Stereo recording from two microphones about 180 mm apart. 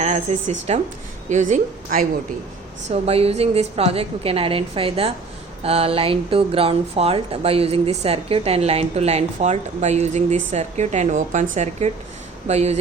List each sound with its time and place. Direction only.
0.0 s a woman's voice: 35° right (ahead or behind)
2.9 s speech: 35° right (ahead or behind)